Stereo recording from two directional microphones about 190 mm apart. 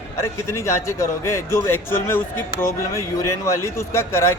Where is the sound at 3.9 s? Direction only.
15° left (ahead or behind).